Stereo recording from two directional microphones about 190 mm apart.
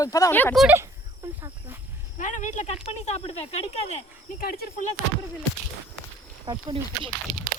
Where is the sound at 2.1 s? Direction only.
40° left (ahead or behind).